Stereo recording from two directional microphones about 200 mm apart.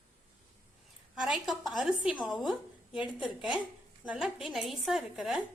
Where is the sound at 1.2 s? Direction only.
Centre (ahead or behind).